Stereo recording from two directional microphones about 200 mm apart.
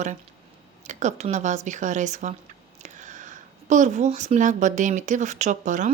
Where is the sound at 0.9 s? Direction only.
35° right (ahead or behind).